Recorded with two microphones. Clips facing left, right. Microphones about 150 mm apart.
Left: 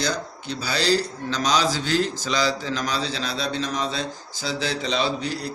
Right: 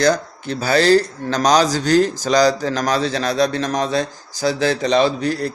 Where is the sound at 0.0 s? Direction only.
55° right (ahead or behind).